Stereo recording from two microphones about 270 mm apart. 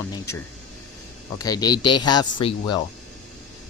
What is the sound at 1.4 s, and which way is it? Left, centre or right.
Speech, centre.